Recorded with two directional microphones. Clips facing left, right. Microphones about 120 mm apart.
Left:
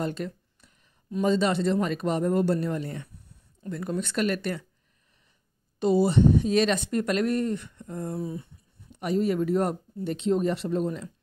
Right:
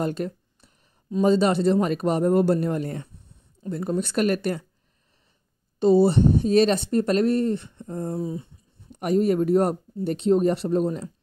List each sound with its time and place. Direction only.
0.0 s speech: 45° right (ahead or behind)
3.6 s speech: 30° right (ahead or behind)
5.8 s speech: 30° right (ahead or behind)
8.9 s speech: 45° right (ahead or behind)